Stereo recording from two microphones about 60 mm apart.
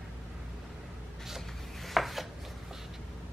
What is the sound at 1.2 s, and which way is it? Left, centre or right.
Chopping, centre.